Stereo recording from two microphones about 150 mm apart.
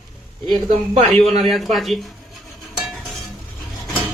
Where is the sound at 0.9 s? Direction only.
45° right (ahead or behind).